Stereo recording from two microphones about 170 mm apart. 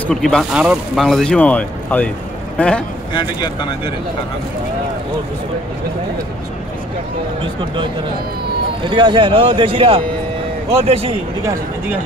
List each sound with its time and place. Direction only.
0.0 s speech: 5° left (ahead or behind)
3.2 s speech: 25° left (ahead or behind)
8.8 s a man's voice: 25° right (ahead or behind)